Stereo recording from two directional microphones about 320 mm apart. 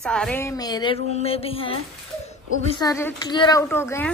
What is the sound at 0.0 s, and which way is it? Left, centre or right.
Speech, centre.